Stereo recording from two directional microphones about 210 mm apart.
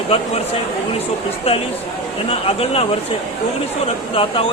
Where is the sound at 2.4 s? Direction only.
30° left (ahead or behind).